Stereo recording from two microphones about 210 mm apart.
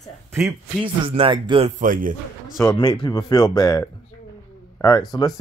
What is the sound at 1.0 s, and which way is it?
Speech, 25° right (ahead or behind).